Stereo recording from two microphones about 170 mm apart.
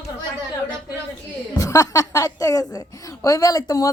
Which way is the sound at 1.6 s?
20° left (ahead or behind).